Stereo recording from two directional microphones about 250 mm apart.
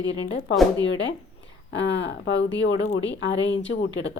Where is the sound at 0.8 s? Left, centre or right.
Left.